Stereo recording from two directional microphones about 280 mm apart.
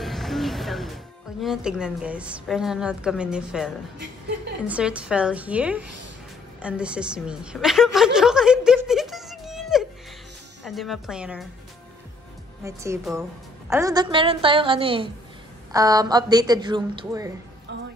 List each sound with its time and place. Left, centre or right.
0.0 s music: centre
1.4 s a woman's voice: centre
12.6 s a woman's voice: centre